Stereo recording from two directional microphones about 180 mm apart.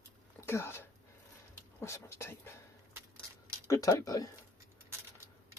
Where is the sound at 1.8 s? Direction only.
15° left (ahead or behind).